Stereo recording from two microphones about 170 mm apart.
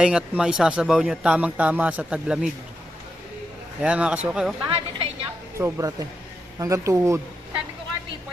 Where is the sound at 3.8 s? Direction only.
5° right (ahead or behind).